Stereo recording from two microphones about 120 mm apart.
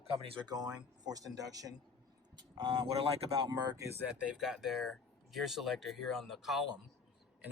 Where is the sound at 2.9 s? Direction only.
55° right (ahead or behind).